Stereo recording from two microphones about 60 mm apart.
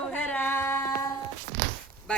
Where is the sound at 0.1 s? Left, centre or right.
Left.